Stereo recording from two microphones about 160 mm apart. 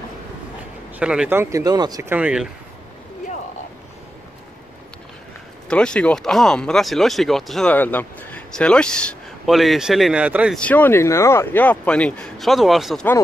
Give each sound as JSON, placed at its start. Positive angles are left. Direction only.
{"t": 0.9, "sound": "speech", "side_deg": -5}
{"t": 2.1, "sound": "speech", "side_deg": -5}
{"t": 5.7, "sound": "speech", "side_deg": 5}
{"t": 7.7, "sound": "speech", "side_deg": 10}
{"t": 10.6, "sound": "speech", "side_deg": 10}